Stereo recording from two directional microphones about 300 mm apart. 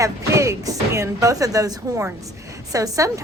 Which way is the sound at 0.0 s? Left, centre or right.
Centre.